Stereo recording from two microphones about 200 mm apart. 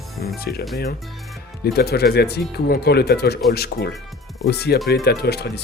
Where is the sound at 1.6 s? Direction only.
50° left (ahead or behind).